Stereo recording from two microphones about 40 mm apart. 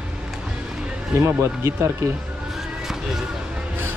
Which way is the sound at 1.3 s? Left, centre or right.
Right.